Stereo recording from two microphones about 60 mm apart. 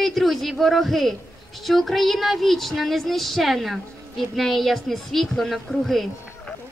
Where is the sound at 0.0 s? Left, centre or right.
Centre.